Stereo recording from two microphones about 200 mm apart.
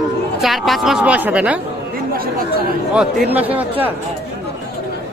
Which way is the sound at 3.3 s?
10° right (ahead or behind).